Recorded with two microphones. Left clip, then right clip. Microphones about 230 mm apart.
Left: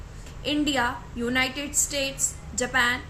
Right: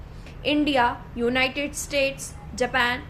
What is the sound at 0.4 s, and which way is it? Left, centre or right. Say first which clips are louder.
A woman's voice: right 4 dB; centre.